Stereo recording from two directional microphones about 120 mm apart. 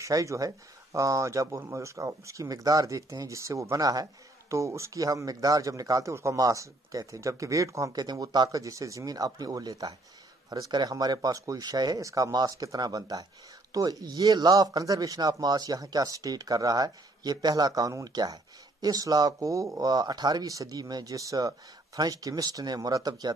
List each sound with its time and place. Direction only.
0.0 s speech: 25° right (ahead or behind)